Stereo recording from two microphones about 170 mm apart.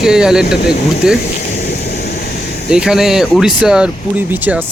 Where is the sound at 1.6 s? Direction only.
70° left (ahead or behind).